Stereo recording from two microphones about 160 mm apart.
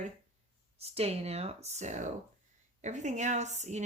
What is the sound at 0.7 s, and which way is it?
A woman's voice, 40° right (ahead or behind).